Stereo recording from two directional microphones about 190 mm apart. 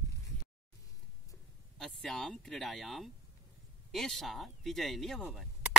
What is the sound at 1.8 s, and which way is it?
Speech, centre (ahead or behind).